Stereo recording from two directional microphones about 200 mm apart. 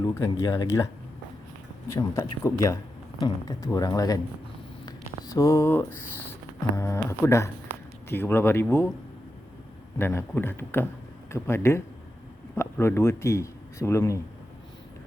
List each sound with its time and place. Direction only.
0.0 s speech: 15° left (ahead or behind)
1.9 s speech: 15° left (ahead or behind)
10.0 s speech: 10° left (ahead or behind)